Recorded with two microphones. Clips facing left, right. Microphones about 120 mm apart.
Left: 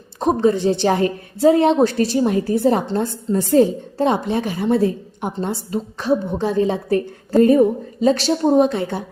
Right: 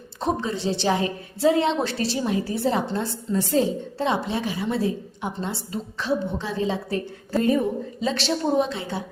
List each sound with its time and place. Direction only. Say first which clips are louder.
0.2 s a woman's voice: left 9 dB; 50° left (ahead or behind)